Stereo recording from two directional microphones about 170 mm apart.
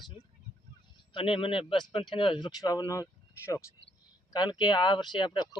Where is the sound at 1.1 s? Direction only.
30° left (ahead or behind).